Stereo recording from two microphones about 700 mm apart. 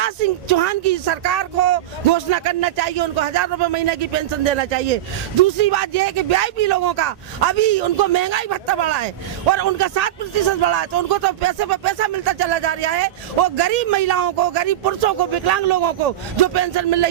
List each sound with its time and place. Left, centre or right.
0.0 s speech: right